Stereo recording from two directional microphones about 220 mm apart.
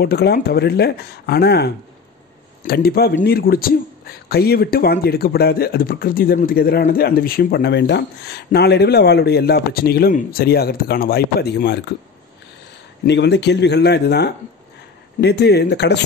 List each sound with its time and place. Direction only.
0.0 s a man's voice: 45° left (ahead or behind)
13.0 s a man's voice: 50° left (ahead or behind)